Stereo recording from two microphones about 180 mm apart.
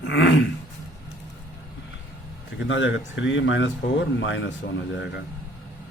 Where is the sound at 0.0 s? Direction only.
90° left.